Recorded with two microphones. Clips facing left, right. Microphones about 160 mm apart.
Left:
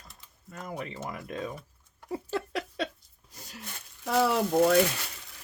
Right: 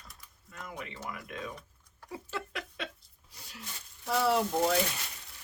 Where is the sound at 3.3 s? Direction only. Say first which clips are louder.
Left 5 dB; 45° left (ahead or behind).